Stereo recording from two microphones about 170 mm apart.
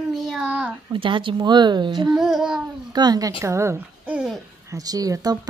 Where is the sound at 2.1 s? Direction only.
5° right (ahead or behind).